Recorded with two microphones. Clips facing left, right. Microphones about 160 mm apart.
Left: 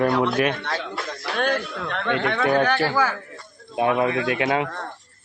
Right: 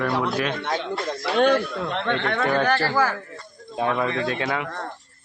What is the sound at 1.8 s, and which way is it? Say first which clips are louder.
Speech: right 2 dB; 15° right (ahead or behind).